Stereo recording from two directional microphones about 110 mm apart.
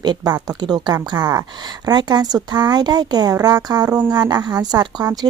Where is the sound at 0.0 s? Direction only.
40° right (ahead or behind).